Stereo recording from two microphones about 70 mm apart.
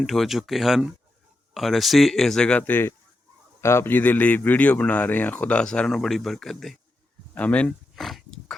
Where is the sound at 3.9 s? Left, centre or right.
Left; by 6.7 s centre.